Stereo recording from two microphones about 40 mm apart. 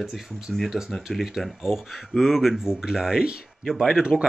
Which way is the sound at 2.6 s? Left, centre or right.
Centre.